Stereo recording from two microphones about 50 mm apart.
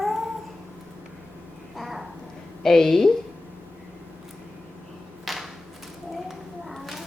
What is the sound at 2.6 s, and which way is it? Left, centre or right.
Speech, centre.